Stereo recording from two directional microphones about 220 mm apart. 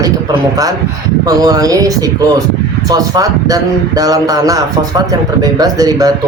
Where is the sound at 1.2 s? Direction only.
15° right (ahead or behind).